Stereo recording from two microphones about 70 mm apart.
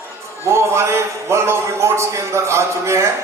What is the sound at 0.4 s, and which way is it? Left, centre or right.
A man's voice, right.